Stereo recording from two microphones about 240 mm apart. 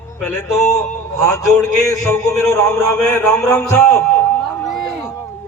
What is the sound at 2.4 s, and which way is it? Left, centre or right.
A man's voice, centre.